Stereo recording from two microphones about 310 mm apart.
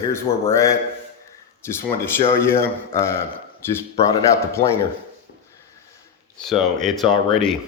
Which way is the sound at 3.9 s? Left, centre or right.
Centre.